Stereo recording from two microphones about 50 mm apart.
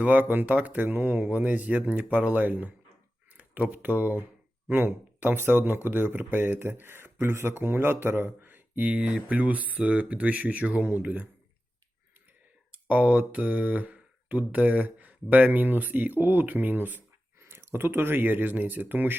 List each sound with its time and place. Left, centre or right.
0.0 s speech: right
8.4 s speech: right
12.7 s speech: right
17.4 s speech: right